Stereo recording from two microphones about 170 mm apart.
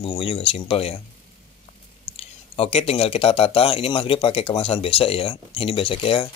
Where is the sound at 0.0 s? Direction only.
35° left (ahead or behind).